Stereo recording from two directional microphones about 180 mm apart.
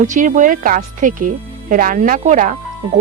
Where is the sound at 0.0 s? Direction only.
45° right (ahead or behind).